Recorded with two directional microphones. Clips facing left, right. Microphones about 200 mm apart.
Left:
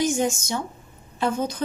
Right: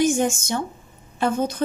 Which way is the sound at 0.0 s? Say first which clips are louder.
Right 3 dB; 50° right (ahead or behind).